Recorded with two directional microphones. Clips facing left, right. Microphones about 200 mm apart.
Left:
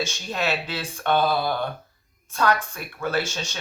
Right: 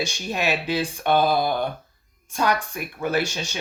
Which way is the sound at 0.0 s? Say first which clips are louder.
Right 1 dB; 15° right (ahead or behind).